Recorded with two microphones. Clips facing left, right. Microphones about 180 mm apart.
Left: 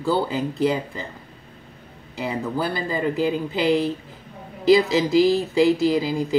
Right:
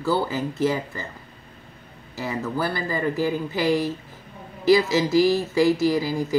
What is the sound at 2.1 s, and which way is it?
Speech, 15° left (ahead or behind).